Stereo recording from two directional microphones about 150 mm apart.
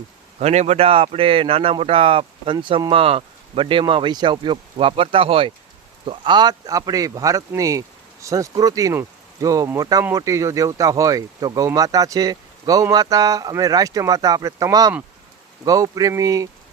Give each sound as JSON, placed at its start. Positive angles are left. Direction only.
{"t": 0.3, "sound": "speech", "side_deg": -45}